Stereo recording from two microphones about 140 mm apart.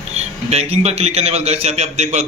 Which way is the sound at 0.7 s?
50° right (ahead or behind).